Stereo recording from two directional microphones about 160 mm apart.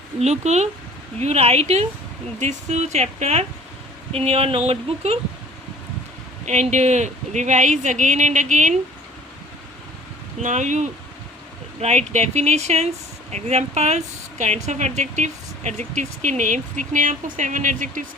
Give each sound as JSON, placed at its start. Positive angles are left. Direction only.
{"t": 0.2, "sound": "speech", "side_deg": -45}
{"t": 6.4, "sound": "speech", "side_deg": -45}
{"t": 10.4, "sound": "speech", "side_deg": -50}